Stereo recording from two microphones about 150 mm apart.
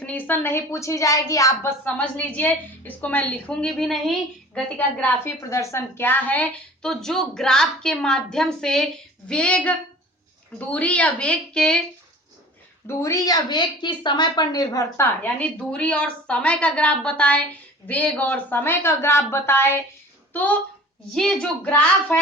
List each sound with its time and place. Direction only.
0.0 s a woman's voice: 10° left (ahead or behind)
5.2 s a woman's voice: 20° left (ahead or behind)
12.9 s a woman's voice: 20° left (ahead or behind)